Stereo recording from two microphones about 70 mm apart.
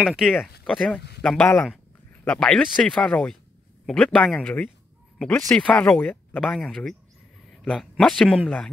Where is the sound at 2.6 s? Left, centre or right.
Centre.